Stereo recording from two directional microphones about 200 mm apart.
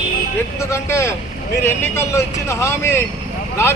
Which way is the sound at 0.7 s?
15° left (ahead or behind).